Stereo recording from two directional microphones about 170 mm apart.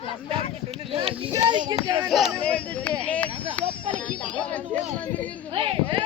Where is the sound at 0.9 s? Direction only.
35° right (ahead or behind).